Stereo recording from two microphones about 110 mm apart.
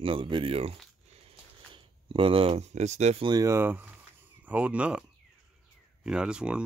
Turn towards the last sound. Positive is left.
turn(degrees=-10)  # may be behind; listen again after turning